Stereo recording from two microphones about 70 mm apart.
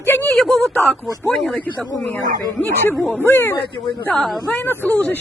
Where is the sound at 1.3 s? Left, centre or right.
Centre.